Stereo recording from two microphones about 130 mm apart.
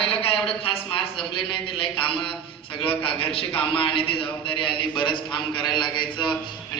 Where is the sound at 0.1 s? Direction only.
45° left (ahead or behind).